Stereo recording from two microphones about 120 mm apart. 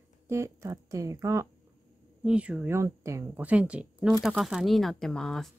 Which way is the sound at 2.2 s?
10° right (ahead or behind).